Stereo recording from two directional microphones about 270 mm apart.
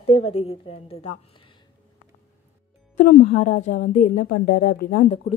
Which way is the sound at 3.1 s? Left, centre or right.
Left.